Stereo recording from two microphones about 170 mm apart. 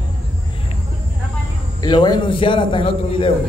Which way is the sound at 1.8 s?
25° left (ahead or behind).